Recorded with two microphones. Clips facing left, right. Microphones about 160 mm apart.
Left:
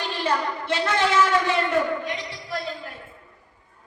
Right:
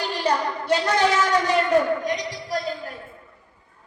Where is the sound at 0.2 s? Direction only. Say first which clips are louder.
Right 1 dB; 40° right (ahead or behind).